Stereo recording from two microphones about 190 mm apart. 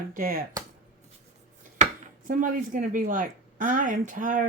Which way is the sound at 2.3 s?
45° right (ahead or behind).